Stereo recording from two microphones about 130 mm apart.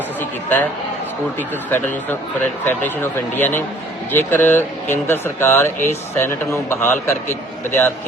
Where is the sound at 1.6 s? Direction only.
15° left (ahead or behind).